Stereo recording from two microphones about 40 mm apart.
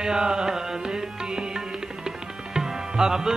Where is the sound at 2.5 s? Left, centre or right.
Centre.